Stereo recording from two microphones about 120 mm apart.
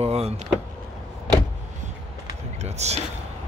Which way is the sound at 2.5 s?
65° right (ahead or behind).